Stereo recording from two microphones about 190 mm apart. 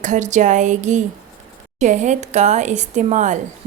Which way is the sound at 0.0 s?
40° right (ahead or behind).